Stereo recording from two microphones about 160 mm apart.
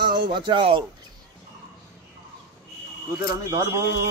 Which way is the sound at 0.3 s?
30° right (ahead or behind).